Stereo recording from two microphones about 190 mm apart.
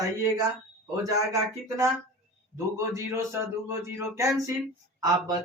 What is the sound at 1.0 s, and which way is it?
Speech, 15° right (ahead or behind).